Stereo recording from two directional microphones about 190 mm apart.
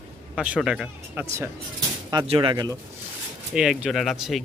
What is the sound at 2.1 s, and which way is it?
Speech, 25° right (ahead or behind).